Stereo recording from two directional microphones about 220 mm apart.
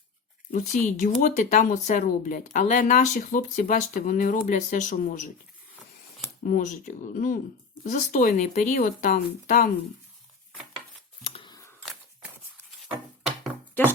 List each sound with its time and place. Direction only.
0.9 s speech: 35° left (ahead or behind)
6.4 s speech: 35° left (ahead or behind)
11.2 s scissors: 25° left (ahead or behind)
11.9 s a sound: 5° right (ahead or behind)